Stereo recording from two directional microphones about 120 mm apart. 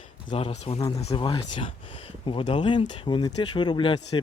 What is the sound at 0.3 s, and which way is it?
Speech, 50° left (ahead or behind).